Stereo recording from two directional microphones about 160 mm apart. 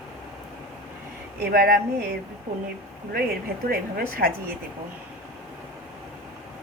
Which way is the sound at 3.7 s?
70° right (ahead or behind).